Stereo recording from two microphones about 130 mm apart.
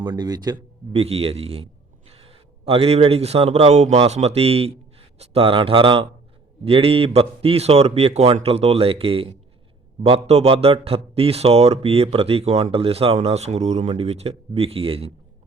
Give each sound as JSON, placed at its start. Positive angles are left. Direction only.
{"t": 0.0, "sound": "speech", "side_deg": -35}
{"t": 0.9, "sound": "a man's voice", "side_deg": -50}